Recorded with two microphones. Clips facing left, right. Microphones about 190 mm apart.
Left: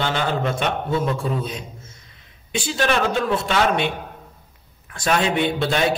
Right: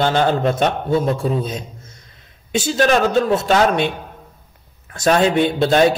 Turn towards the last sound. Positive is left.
turn(degrees=-40)  # may be behind; listen again after turning